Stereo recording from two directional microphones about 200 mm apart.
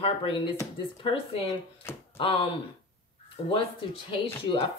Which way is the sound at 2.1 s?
25° left (ahead or behind).